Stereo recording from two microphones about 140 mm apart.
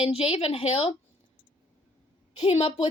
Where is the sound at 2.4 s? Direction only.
50° left (ahead or behind).